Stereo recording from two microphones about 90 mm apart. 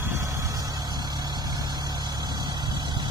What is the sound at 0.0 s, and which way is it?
Vehicle, 35° right (ahead or behind).